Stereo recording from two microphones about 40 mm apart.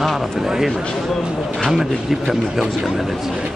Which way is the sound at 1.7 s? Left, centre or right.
Centre.